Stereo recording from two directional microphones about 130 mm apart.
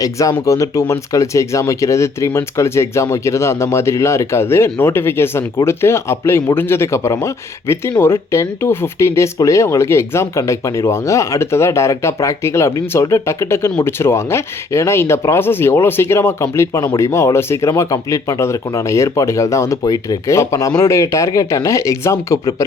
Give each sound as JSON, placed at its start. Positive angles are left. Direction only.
{"t": 0.0, "sound": "speech", "side_deg": 25}